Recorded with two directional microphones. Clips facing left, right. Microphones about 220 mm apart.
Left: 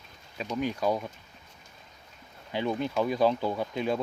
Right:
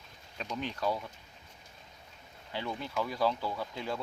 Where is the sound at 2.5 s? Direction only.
20° left (ahead or behind).